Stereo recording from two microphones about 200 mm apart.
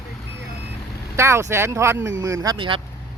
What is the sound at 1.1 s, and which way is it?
Speech, 15° right (ahead or behind).